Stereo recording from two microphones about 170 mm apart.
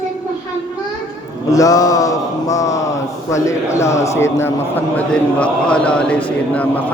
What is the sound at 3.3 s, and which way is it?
A man's voice, 20° left (ahead or behind).